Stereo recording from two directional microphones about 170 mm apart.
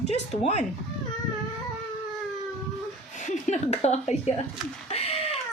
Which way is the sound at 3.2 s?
45° left (ahead or behind).